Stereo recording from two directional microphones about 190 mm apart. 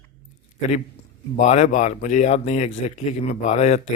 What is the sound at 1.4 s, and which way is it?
Speech, 40° left (ahead or behind).